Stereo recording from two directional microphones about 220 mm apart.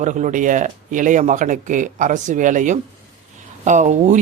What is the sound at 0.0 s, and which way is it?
Speech, 35° right (ahead or behind).